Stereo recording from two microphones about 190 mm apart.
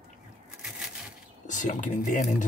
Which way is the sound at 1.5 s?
40° left (ahead or behind).